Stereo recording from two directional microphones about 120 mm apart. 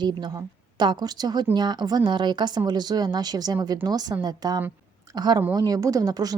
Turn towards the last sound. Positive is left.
turn(degrees=-30)  # may be behind; listen again after turning